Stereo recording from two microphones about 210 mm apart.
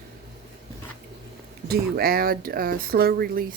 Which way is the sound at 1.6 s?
45° right (ahead or behind).